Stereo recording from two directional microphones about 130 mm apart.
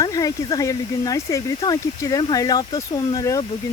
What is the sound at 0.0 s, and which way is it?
Speech, 30° left (ahead or behind).